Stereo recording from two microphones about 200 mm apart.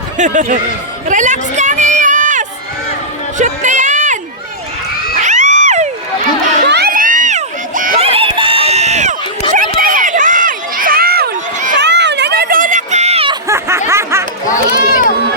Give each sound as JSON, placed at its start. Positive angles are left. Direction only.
{"t": 0.2, "sound": "speech", "side_deg": -40}
{"t": 1.0, "sound": "run", "side_deg": -40}
{"t": 3.3, "sound": "a sound", "side_deg": -40}
{"t": 5.2, "sound": "cat", "side_deg": -35}
{"t": 6.7, "sound": "crowd", "side_deg": -50}
{"t": 8.0, "sound": "run", "side_deg": -30}
{"t": 9.5, "sound": "crowd", "side_deg": -45}
{"t": 13.5, "sound": "snicker", "side_deg": -15}
{"t": 14.8, "sound": "run", "side_deg": 40}